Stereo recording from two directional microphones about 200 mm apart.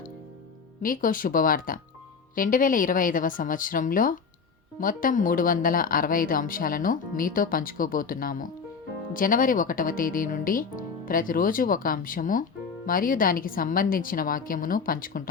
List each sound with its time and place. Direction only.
0.8 s speech: 45° left (ahead or behind)